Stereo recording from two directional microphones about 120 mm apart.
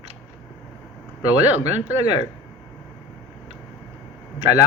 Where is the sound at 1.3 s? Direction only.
15° right (ahead or behind).